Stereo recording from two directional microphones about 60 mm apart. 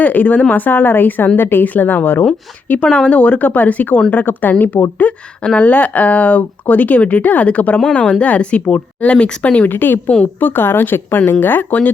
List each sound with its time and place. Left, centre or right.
0.0 s speech: left
9.6 s speech: left